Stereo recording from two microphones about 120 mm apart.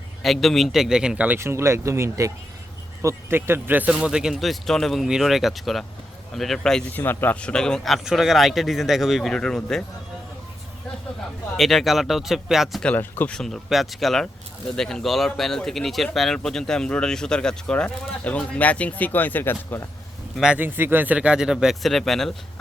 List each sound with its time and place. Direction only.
0.2 s speech: centre (ahead or behind)
1.4 s speech: 20° right (ahead or behind); by 6.9 s 5° left (ahead or behind)
6.9 s speech: 15° left (ahead or behind)
11.5 s speech: centre (ahead or behind)
12.9 s speech: 15° left (ahead or behind)
20.4 s speech: 10° right (ahead or behind)